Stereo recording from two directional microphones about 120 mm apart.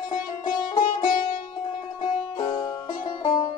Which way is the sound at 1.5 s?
40° left (ahead or behind).